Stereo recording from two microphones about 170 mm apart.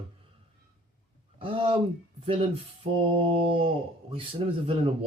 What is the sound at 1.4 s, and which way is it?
Speech, 30° right (ahead or behind).